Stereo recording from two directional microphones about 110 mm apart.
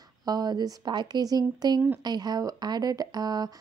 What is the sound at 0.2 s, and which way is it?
Speech, 40° right (ahead or behind).